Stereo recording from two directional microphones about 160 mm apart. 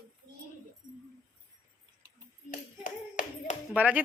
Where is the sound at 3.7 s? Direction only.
10° right (ahead or behind).